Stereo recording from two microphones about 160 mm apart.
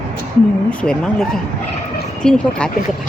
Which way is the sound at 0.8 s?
5° left (ahead or behind).